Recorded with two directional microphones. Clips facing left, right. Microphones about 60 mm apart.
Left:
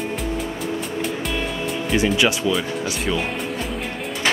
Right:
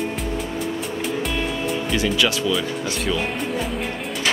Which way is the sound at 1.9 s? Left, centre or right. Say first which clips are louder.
Left 3 dB; left.